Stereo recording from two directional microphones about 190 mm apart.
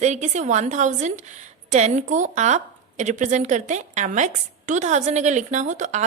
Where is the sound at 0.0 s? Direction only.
35° right (ahead or behind).